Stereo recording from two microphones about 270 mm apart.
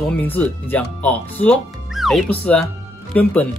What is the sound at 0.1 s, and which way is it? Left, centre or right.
Speech, centre.